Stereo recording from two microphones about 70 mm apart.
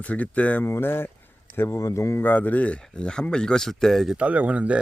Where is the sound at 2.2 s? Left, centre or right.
Left; by 4.1 s centre.